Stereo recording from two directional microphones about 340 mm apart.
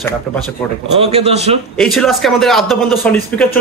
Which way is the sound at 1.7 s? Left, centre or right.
Centre.